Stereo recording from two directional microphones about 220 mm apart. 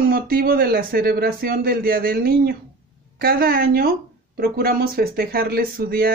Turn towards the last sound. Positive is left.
turn(degrees=-45)  # may be behind; listen again after turning